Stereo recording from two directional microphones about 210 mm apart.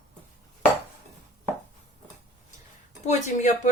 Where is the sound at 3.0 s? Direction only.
35° left (ahead or behind).